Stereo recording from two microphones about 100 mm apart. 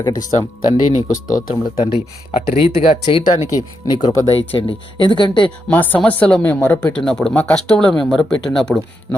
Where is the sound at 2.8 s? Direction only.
65° left (ahead or behind).